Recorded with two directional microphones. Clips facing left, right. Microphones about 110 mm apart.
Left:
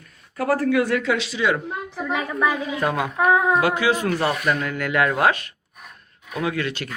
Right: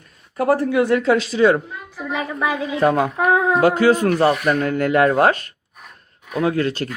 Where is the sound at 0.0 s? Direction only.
25° right (ahead or behind); by 1.6 s 40° right (ahead or behind).